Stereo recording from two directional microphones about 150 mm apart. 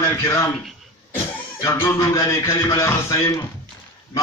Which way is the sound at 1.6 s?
20° left (ahead or behind).